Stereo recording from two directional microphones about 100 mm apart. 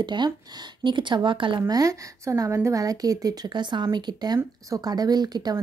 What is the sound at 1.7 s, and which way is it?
A woman's voice, 35° right (ahead or behind).